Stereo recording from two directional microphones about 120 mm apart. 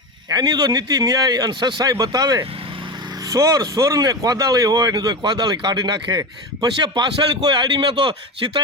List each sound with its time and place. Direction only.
0.3 s speech: 35° right (ahead or behind)